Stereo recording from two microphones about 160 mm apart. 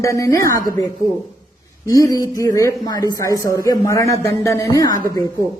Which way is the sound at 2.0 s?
20° left (ahead or behind).